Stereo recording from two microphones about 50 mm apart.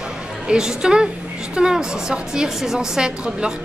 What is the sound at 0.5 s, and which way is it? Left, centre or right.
A woman's voice, centre.